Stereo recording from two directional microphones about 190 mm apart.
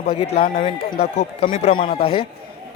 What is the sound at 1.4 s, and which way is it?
Speech, 30° left (ahead or behind).